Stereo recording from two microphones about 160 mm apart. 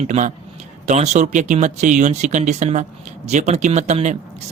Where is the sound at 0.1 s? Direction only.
50° right (ahead or behind).